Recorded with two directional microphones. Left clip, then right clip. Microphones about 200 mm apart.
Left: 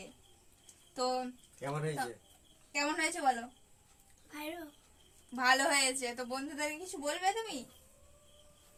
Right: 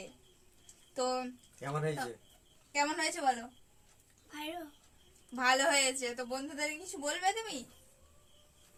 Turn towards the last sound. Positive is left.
turn(degrees=5)  # may be behind; listen again after turning